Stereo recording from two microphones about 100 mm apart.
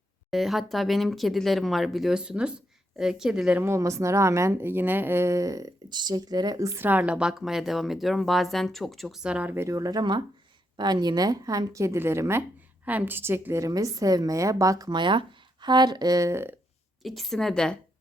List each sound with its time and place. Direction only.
0.3 s speech: centre (ahead or behind)
3.6 s speech: 30° right (ahead or behind)
5.9 s speech: 45° right (ahead or behind)
6.8 s speech: 15° right (ahead or behind)
9.6 s a woman's voice: 35° right (ahead or behind)
14.8 s a woman's voice: 50° right (ahead or behind); by 16.6 s 25° right (ahead or behind)
17.0 s speech: centre (ahead or behind)